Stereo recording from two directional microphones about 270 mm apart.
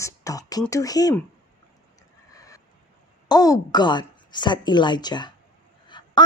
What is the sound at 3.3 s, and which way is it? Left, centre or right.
A woman's voice, centre.